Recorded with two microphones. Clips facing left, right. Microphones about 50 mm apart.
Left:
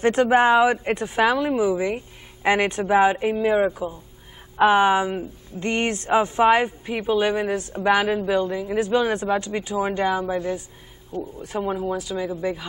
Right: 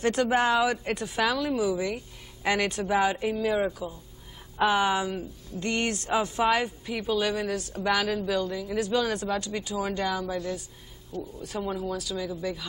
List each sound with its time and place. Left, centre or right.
0.0 s speech: left